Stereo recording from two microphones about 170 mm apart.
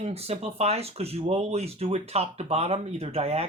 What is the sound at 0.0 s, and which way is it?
Speech, 35° right (ahead or behind).